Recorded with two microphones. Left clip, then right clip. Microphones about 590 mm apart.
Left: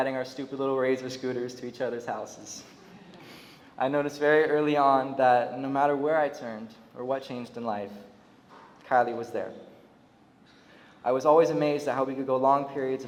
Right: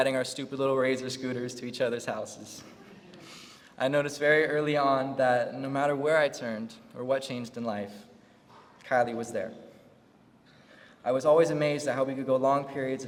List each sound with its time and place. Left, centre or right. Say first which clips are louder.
0.0 s a man's voice: right 2 dB; right
3.8 s a woman's voice: even; right
11.0 s speech: left 2 dB; right